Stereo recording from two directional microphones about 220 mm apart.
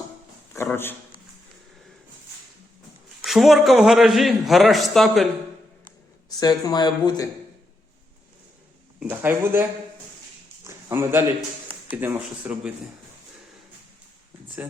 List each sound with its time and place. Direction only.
0.5 s speech: 10° left (ahead or behind)
3.2 s a man's voice: centre (ahead or behind)
6.4 s speech: 20° left (ahead or behind)
9.0 s a man's voice: 10° right (ahead or behind)